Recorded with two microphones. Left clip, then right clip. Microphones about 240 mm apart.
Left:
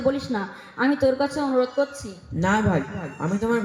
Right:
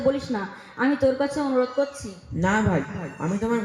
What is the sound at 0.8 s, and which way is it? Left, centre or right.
A man's voice, left.